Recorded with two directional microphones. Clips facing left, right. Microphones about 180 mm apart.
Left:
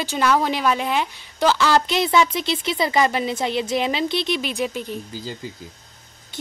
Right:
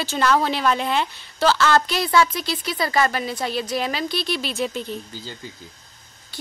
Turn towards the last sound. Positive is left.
turn(degrees=10)  # may be behind; listen again after turning